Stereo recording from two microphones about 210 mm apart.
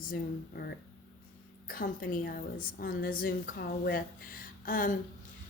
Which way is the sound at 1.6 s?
45° left (ahead or behind).